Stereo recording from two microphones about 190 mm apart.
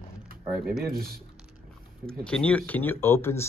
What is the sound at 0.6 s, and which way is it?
Speech, 50° right (ahead or behind).